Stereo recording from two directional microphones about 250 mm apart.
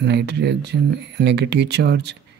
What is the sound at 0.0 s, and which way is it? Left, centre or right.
Speech, right.